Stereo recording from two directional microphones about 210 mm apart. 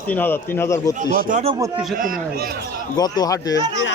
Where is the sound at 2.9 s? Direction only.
20° left (ahead or behind).